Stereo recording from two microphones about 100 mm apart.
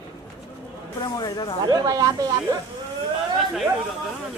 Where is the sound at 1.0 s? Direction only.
40° left (ahead or behind).